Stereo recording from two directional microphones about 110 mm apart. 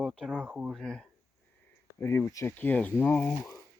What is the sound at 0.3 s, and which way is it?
Speech, 10° right (ahead or behind).